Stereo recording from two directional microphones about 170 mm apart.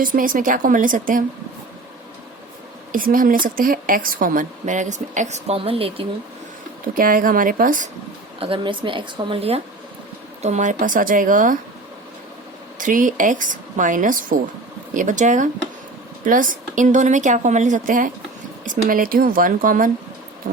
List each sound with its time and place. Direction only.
0.0 s a woman's voice: 55° right (ahead or behind)
2.9 s a woman's voice: 55° right (ahead or behind); by 6.1 s 35° right (ahead or behind)
6.9 s speech: 55° right (ahead or behind)
8.4 s speech: 30° right (ahead or behind)
10.4 s a woman's voice: 45° right (ahead or behind)
12.8 s a woman's voice: 50° right (ahead or behind)